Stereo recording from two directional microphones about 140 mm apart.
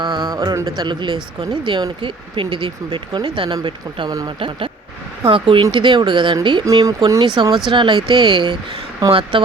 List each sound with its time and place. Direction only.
0.0 s music: 35° right (ahead or behind)
0.3 s speech: 20° right (ahead or behind); by 9.5 s 40° right (ahead or behind)